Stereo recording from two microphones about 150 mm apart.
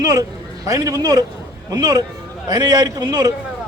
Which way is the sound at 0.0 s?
25° right (ahead or behind).